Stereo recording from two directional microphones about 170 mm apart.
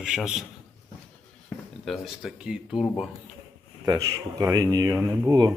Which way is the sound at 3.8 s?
20° right (ahead or behind).